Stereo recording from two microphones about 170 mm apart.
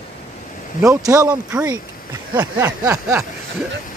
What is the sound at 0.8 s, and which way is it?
Speech, 20° right (ahead or behind).